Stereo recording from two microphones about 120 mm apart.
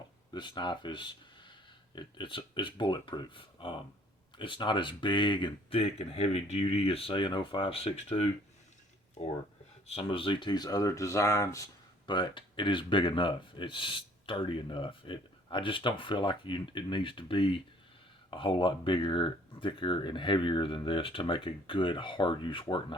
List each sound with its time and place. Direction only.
0.3 s speech: 40° left (ahead or behind); by 8.3 s 55° left (ahead or behind)
9.8 s speech: 55° left (ahead or behind)